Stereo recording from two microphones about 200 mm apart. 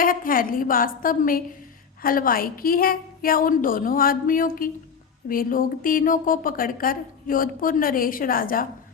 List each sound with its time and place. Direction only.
0.0 s speech: 45° left (ahead or behind)